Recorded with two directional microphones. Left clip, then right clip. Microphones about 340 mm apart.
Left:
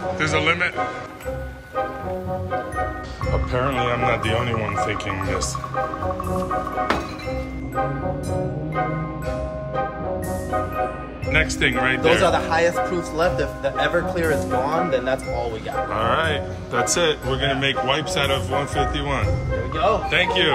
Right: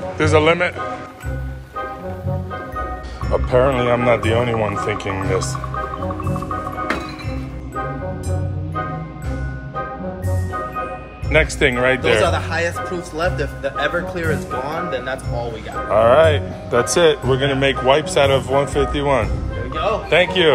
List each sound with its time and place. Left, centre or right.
0.2 s a man's voice: centre
3.3 s a man's voice: centre
11.2 s a man's voice: centre
12.2 s speech: left
15.9 s a man's voice: centre
19.7 s music: left
20.1 s a man's voice: centre